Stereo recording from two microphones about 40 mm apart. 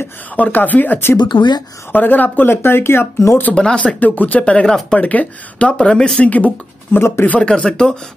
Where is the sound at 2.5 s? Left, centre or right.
Left.